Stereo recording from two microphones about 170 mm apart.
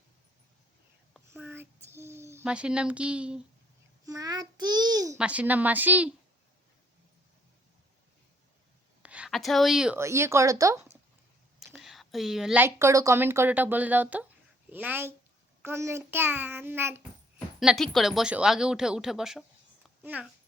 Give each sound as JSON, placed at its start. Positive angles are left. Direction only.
{"t": 1.3, "sound": "a sound", "side_deg": -10}
{"t": 1.9, "sound": "speech", "side_deg": -15}
{"t": 4.0, "sound": "child singing", "side_deg": -20}
{"t": 5.1, "sound": "a woman's voice", "side_deg": -5}
{"t": 9.0, "sound": "a woman's voice", "side_deg": -5}
{"t": 10.0, "sound": "a woman's voice", "side_deg": -15}
{"t": 11.6, "sound": "a sound", "side_deg": 0}
{"t": 12.6, "sound": "a woman's voice", "side_deg": -15}
{"t": 17.6, "sound": "speech", "side_deg": 0}